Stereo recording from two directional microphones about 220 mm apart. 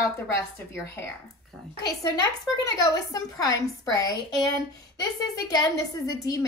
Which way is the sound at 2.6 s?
15° left (ahead or behind).